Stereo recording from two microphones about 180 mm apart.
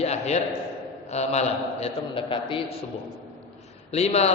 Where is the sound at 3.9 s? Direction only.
35° left (ahead or behind).